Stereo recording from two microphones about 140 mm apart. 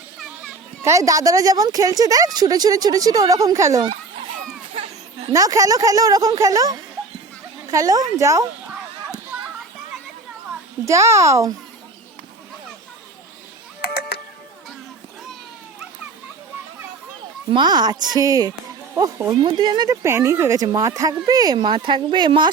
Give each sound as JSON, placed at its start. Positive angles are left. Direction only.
{"t": 0.8, "sound": "speech", "side_deg": -20}
{"t": 4.7, "sound": "a sound", "side_deg": -40}
{"t": 5.3, "sound": "speech", "side_deg": -25}
{"t": 10.8, "sound": "speech", "side_deg": -20}
{"t": 17.5, "sound": "speech", "side_deg": -30}